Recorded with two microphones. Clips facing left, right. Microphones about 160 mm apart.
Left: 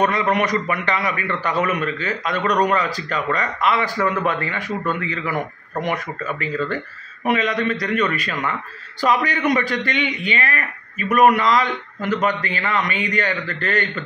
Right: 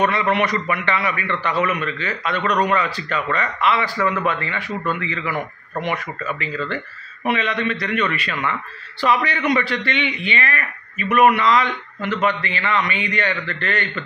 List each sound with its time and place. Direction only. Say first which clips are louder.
0.0 s a man's voice: even; 40° left (ahead or behind)